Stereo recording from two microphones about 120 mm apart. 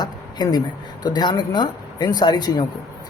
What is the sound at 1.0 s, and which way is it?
Speech, 35° left (ahead or behind).